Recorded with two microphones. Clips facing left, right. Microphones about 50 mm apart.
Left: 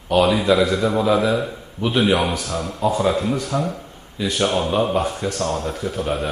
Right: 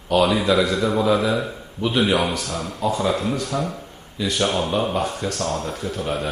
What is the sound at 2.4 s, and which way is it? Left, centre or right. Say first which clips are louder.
Speech: left 2 dB; left.